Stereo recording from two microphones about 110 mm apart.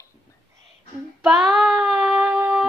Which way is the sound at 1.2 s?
5° right (ahead or behind).